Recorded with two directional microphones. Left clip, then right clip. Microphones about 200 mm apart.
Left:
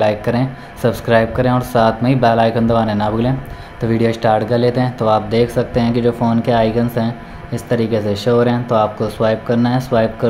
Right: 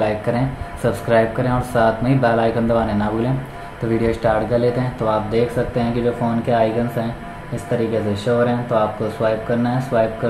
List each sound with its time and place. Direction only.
0.3 s speech: 35° left (ahead or behind)